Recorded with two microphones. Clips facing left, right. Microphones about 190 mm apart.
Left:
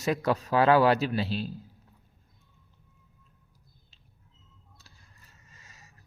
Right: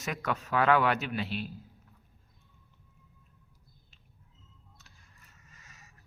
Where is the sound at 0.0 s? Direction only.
30° left (ahead or behind).